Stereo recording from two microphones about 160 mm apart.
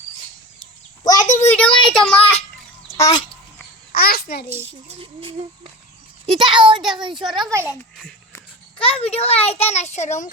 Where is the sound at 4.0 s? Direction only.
70° left (ahead or behind).